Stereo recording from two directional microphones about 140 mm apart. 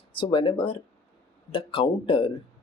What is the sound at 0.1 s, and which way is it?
Speech, 40° left (ahead or behind).